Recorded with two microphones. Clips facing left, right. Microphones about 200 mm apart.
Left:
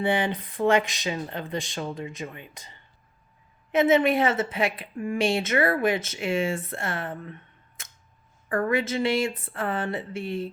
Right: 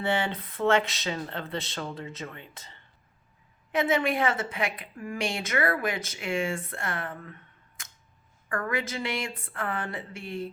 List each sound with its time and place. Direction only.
0.0 s a woman's voice: 15° left (ahead or behind)
7.8 s camera: 25° left (ahead or behind)
8.4 s a woman's voice: 25° left (ahead or behind)